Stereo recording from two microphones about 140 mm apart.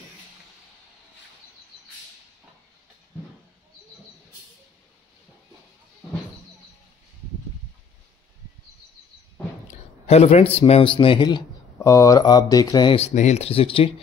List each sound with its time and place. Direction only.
10.0 s a man's voice: 50° left (ahead or behind); by 12.9 s 30° left (ahead or behind)
12.9 s speech: 55° left (ahead or behind)